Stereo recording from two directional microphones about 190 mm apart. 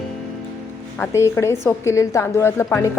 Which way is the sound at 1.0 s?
15° left (ahead or behind).